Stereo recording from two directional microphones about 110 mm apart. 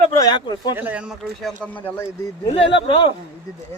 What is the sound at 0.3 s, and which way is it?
Speech, 40° left (ahead or behind).